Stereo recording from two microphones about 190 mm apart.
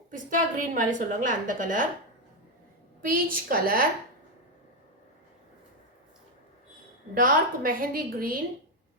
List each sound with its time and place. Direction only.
0.1 s a woman's voice: 45° right (ahead or behind)
3.1 s a woman's voice: 50° right (ahead or behind)
7.1 s a woman's voice: 50° right (ahead or behind)